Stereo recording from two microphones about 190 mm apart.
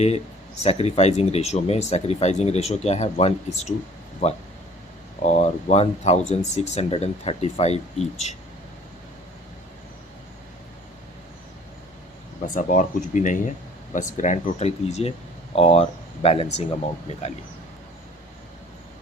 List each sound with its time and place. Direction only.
0.6 s speech: 35° left (ahead or behind)
12.4 s speech: 45° left (ahead or behind)